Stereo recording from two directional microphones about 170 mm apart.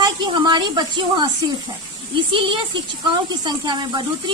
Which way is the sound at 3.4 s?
25° right (ahead or behind).